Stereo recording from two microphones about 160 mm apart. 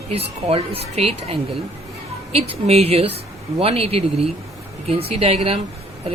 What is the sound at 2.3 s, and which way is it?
Speech, 40° right (ahead or behind).